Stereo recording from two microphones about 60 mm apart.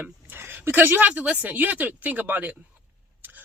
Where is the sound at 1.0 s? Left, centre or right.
Right.